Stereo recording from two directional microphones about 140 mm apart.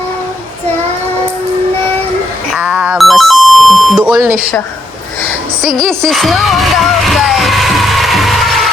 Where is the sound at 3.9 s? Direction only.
10° right (ahead or behind).